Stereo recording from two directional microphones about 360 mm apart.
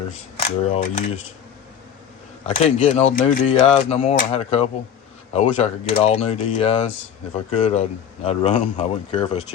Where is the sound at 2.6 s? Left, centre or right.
Centre.